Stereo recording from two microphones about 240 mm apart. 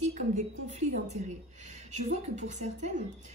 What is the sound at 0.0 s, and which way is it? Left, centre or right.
A woman's voice, right.